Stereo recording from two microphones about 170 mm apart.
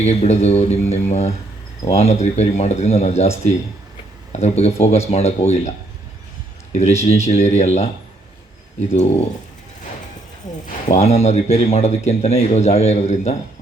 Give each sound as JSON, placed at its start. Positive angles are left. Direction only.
{"t": 0.0, "sound": "speech", "side_deg": 40}
{"t": 7.0, "sound": "speech", "side_deg": 40}
{"t": 10.8, "sound": "speech", "side_deg": 40}